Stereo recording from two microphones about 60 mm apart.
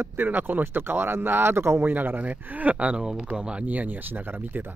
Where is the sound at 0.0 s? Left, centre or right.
Right.